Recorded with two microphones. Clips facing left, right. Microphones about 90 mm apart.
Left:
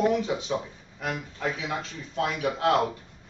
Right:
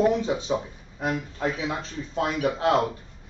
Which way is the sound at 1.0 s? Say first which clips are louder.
Right 4 dB; 30° right (ahead or behind).